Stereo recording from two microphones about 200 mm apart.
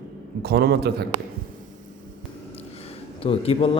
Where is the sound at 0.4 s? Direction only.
55° right (ahead or behind).